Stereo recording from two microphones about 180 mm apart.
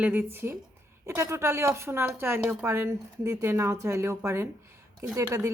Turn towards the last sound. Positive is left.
turn(degrees=-15)  # may be behind; listen again after turning